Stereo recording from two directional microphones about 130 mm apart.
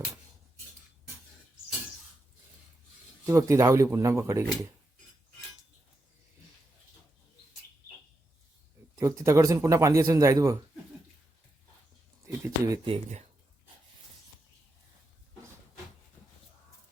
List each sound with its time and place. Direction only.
3.2 s speech: 25° right (ahead or behind)
9.0 s speech: 25° right (ahead or behind)
12.5 s speech: 25° right (ahead or behind)